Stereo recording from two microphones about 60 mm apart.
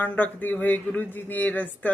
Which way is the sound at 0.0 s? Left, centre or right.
Left.